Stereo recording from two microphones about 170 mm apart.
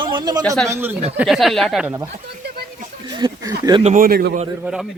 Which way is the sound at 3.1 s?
25° right (ahead or behind).